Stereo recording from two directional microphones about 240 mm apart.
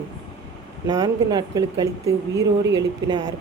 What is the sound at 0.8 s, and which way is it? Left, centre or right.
A woman's voice, centre.